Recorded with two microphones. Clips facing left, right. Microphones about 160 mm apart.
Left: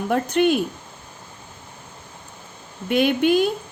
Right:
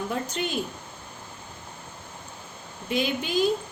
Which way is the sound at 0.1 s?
60° left (ahead or behind).